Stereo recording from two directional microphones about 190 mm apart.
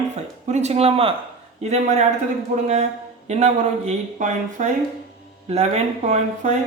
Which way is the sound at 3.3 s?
35° right (ahead or behind).